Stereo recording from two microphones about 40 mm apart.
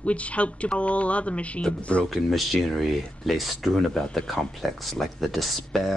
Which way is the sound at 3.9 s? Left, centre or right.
Centre.